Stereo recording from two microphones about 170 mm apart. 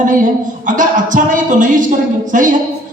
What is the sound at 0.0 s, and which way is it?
A man's voice, 50° right (ahead or behind).